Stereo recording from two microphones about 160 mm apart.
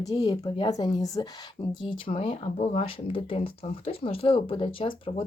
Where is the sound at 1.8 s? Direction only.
35° left (ahead or behind).